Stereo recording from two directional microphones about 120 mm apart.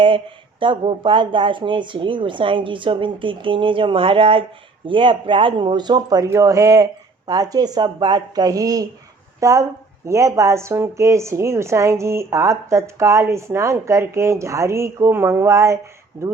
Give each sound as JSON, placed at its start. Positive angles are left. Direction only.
{"t": 0.6, "sound": "speech", "side_deg": -45}